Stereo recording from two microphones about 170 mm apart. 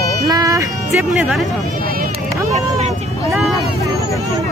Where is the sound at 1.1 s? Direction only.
Centre (ahead or behind).